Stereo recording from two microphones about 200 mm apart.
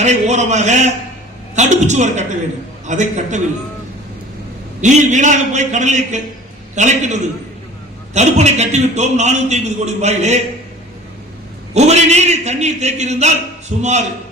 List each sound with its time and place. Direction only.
0.0 s a man's voice: 35° right (ahead or behind)
4.8 s a man's voice: 35° right (ahead or behind)
11.7 s a man's voice: 35° right (ahead or behind)